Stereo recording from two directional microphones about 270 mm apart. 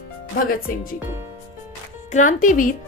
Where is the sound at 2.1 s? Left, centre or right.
Left.